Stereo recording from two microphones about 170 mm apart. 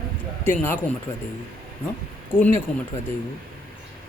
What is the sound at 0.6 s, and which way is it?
Speech, 10° left (ahead or behind).